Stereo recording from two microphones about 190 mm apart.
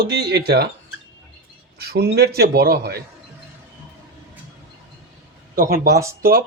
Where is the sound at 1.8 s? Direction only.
55° right (ahead or behind).